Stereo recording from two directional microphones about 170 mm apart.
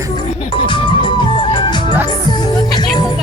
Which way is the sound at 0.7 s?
30° left (ahead or behind).